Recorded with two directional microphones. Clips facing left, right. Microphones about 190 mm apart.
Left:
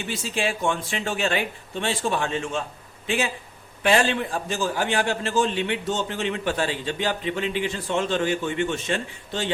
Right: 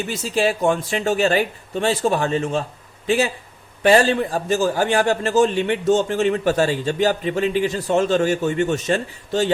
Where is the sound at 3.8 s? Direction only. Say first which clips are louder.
Right 6 dB; 40° right (ahead or behind).